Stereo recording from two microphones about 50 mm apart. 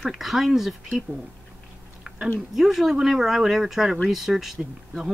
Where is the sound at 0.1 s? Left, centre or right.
Centre.